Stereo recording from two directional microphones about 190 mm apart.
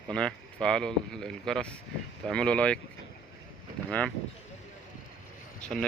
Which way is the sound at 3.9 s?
5° left (ahead or behind).